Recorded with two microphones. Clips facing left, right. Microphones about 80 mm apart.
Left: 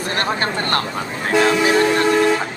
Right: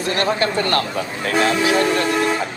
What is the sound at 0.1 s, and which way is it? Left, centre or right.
Speech, left.